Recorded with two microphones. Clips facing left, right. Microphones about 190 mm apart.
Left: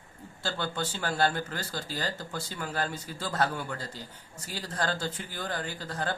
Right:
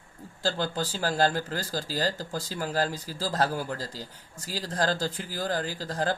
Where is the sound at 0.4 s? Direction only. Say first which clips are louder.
Right 4 dB; 35° right (ahead or behind).